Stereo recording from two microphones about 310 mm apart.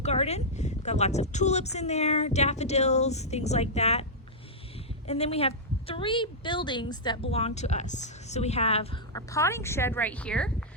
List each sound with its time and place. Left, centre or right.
0.0 s a woman's voice: centre
5.0 s a woman's voice: centre